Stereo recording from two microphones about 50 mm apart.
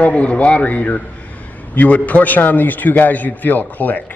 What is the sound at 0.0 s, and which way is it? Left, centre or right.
A man's voice, left.